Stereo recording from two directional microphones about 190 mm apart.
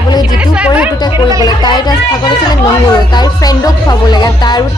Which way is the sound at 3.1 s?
20° left (ahead or behind).